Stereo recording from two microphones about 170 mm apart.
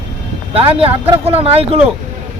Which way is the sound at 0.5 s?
35° right (ahead or behind).